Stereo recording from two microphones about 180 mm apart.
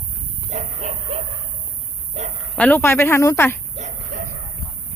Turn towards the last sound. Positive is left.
turn(degrees=-40)  # may be behind; listen again after turning